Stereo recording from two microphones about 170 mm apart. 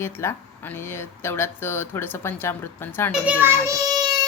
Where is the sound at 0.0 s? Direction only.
15° left (ahead or behind).